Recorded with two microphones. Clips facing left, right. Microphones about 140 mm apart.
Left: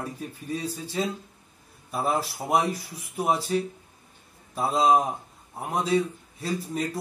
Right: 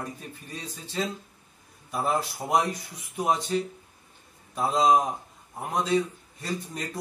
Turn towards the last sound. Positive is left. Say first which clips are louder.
# left 4 dB
turn(degrees=5)  # may be behind; listen again after turning